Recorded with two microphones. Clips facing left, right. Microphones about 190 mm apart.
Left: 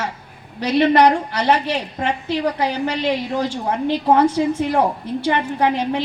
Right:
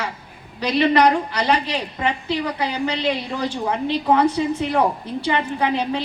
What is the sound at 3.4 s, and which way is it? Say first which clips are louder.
A woman's voice: left 2 dB; 65° right (ahead or behind).